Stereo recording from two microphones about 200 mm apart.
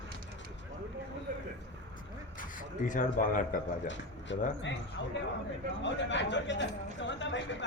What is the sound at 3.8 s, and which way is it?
A man's voice, 65° left (ahead or behind).